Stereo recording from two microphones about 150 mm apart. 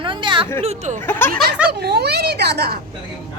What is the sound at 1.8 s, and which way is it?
Speech, 90° right.